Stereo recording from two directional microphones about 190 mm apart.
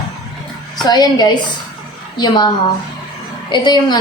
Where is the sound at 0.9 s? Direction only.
20° left (ahead or behind).